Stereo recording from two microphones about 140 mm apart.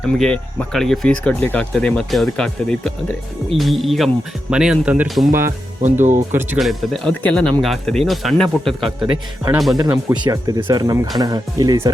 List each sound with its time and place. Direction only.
0.1 s speech: 5° left (ahead or behind)
5.5 s speech: 60° right (ahead or behind)
6.6 s speech: centre (ahead or behind)
9.8 s speech: 25° right (ahead or behind)